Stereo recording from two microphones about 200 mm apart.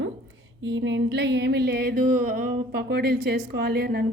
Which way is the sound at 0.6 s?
65° right (ahead or behind).